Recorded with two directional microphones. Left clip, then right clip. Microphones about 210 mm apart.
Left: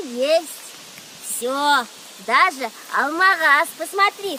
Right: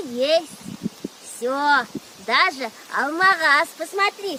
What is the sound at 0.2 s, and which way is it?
Speech, 10° left (ahead or behind).